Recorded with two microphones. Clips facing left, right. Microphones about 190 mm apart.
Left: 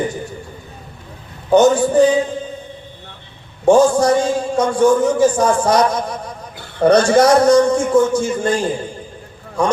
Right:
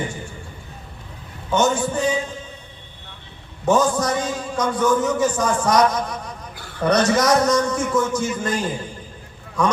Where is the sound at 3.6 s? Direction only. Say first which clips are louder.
Left 7 dB; 30° left (ahead or behind).